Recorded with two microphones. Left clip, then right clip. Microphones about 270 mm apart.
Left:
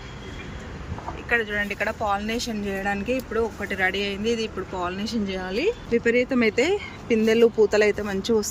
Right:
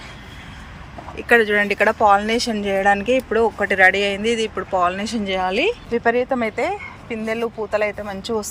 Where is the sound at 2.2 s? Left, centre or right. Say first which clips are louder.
Right 8 dB; centre.